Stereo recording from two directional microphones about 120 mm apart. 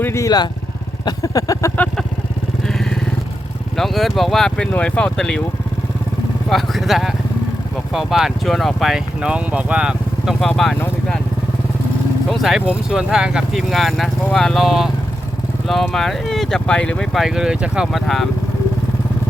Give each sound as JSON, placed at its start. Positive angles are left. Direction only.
{"t": 0.0, "sound": "vehicle", "side_deg": 20}
{"t": 2.6, "sound": "vehicle", "side_deg": 5}
{"t": 3.8, "sound": "speech", "side_deg": 0}
{"t": 6.5, "sound": "speech", "side_deg": 0}
{"t": 10.4, "sound": "speech", "side_deg": 0}
{"t": 12.3, "sound": "speech", "side_deg": 0}